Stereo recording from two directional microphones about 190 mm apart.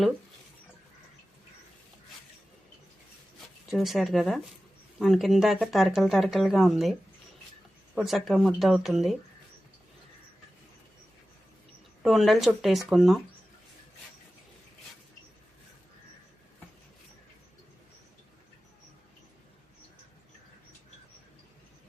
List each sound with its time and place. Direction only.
3.7 s speech: centre (ahead or behind)
7.9 s speech: centre (ahead or behind)
12.0 s speech: centre (ahead or behind)